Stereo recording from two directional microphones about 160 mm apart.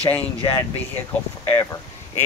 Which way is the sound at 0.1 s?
10° left (ahead or behind).